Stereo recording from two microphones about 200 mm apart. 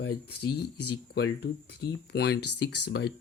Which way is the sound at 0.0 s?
55° left (ahead or behind).